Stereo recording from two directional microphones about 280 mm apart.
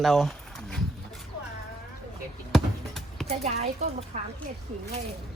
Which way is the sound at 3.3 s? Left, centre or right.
Right.